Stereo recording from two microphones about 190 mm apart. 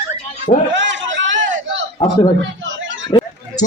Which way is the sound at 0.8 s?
70° right (ahead or behind).